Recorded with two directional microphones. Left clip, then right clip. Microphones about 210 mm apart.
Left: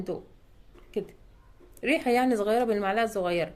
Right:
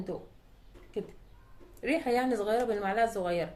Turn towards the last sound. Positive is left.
turn(degrees=45)  # may be behind; listen again after turning